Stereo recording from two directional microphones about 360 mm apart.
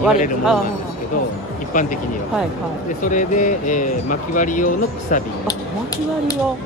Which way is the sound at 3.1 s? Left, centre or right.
Left.